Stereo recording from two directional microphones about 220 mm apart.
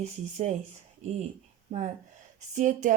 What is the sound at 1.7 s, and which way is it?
Speech, 30° right (ahead or behind).